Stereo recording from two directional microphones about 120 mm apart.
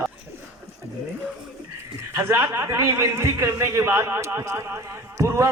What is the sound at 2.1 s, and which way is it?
A man's voice, 20° right (ahead or behind).